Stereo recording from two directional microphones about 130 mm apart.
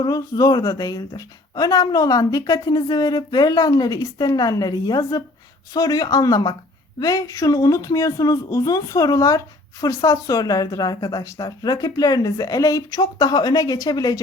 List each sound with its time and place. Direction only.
0.0 s speech: 30° left (ahead or behind)